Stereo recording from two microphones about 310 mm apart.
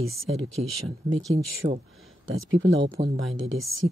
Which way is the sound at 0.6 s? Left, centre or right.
Right.